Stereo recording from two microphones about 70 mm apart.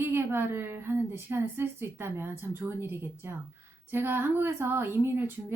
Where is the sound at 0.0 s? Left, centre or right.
Right.